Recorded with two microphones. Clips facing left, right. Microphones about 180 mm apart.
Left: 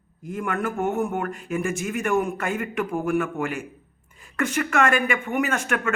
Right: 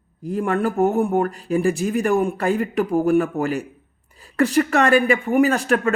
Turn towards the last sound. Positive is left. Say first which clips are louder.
# right 7 dB
turn(degrees=-35)  # may be behind; listen again after turning